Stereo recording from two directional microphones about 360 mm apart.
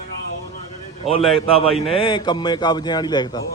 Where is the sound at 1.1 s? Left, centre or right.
Centre.